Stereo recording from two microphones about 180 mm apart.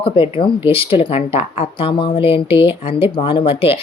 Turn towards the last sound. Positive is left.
turn(degrees=30)  # may be behind; listen again after turning